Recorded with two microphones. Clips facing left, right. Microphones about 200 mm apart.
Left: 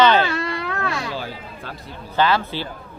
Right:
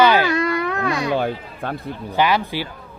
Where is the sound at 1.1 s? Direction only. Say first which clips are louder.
Right 8 dB; 55° right (ahead or behind).